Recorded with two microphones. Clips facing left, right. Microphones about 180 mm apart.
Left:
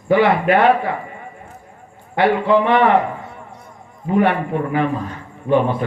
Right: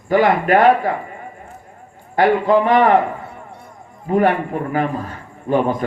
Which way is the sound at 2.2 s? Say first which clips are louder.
Right 1 dB; 40° right (ahead or behind).